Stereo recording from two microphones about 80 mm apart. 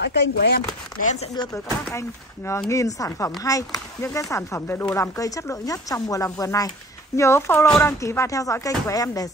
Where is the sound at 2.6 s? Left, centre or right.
Left.